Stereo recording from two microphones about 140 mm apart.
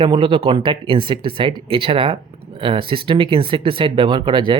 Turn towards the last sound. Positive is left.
turn(degrees=-35)  # may be behind; listen again after turning